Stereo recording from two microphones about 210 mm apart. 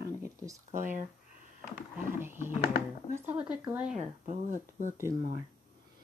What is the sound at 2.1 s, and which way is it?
Speech, 10° right (ahead or behind).